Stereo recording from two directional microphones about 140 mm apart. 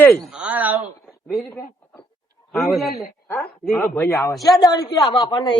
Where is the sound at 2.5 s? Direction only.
Centre (ahead or behind).